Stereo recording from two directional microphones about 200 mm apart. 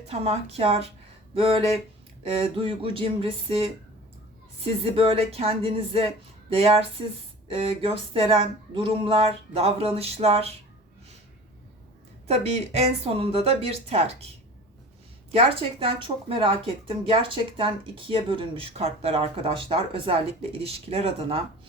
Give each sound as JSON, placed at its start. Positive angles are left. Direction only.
{"t": 0.1, "sound": "speech", "side_deg": -30}
{"t": 12.3, "sound": "speech", "side_deg": -30}
{"t": 15.4, "sound": "speech", "side_deg": -30}